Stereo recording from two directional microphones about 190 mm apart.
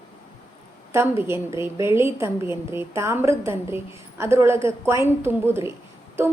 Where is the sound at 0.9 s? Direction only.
15° right (ahead or behind).